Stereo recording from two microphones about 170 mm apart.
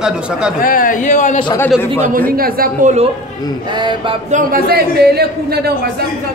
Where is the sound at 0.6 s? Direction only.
55° left (ahead or behind).